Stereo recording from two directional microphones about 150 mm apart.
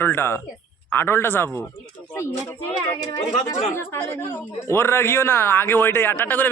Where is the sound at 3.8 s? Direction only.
15° left (ahead or behind).